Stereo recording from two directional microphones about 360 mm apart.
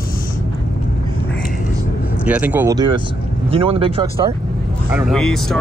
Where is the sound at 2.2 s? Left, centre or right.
Centre.